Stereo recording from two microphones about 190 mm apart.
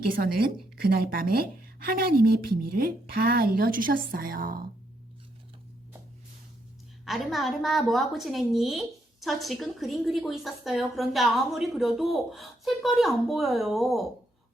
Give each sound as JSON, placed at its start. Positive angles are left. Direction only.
{"t": 0.0, "sound": "speech", "side_deg": -50}
{"t": 7.0, "sound": "a woman's voice", "side_deg": 0}